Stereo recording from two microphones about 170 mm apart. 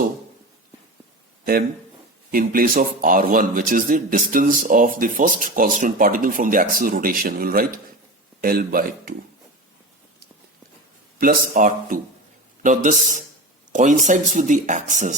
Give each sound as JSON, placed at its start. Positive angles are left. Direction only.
{"t": 2.3, "sound": "a man's voice", "side_deg": -55}
{"t": 11.2, "sound": "a man's voice", "side_deg": -55}